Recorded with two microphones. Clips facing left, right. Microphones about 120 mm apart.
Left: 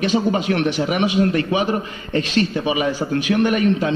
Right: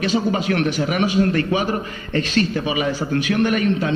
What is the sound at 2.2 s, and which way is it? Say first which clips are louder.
Speech: even; 40° right (ahead or behind).